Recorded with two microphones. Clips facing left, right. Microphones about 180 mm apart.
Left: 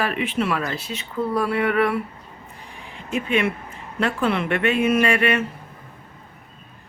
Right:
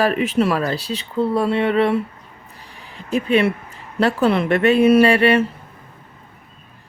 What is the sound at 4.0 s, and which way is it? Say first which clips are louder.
Speech: right 5 dB; 35° right (ahead or behind).